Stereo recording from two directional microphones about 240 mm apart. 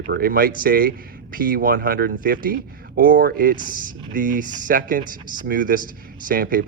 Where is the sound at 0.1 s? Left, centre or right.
Right.